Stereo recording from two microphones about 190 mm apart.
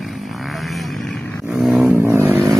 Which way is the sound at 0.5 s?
Centre (ahead or behind).